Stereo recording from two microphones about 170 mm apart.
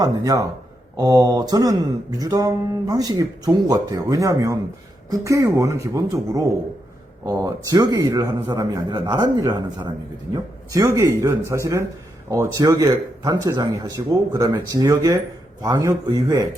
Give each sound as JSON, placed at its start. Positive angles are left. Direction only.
{"t": 0.0, "sound": "a man's voice", "side_deg": -20}